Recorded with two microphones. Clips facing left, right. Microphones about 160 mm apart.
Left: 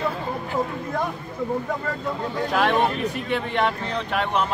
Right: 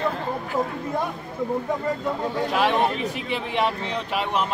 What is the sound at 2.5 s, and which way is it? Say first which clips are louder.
Speech: left 1 dB; centre (ahead or behind).